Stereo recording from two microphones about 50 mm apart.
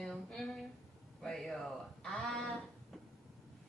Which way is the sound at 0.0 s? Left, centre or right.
Centre.